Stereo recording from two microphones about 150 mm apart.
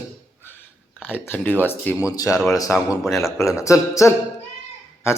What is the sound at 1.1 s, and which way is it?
Speech, 10° left (ahead or behind).